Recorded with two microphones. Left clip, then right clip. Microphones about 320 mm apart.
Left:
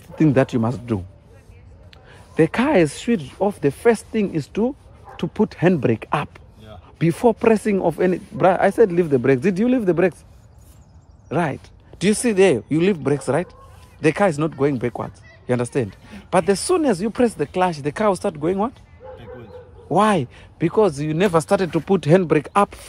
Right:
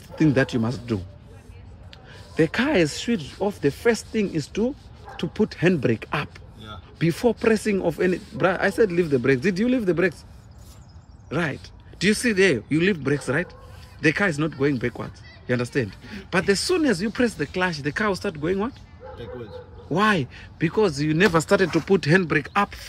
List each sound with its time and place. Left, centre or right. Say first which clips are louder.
0.1 s speech: left 3 dB; centre
2.0 s speech: left 4 dB; centre
11.2 s speech: left 4 dB; centre
19.9 s speech: left 4 dB; centre